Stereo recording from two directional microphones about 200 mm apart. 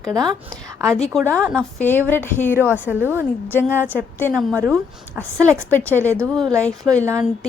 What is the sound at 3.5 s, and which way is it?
Speech, 10° left (ahead or behind).